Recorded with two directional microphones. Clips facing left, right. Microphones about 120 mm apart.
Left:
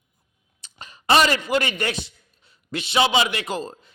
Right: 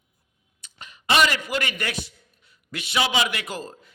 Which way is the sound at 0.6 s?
35° left (ahead or behind).